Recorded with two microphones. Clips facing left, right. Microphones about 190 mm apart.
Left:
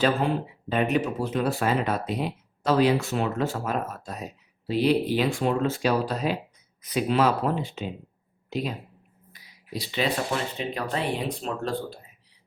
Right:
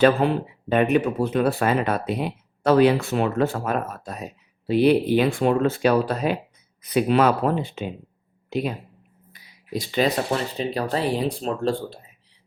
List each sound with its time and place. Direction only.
0.2 s speech: 65° right (ahead or behind)
9.3 s a sound: 50° right (ahead or behind)
10.6 s speech: 35° right (ahead or behind)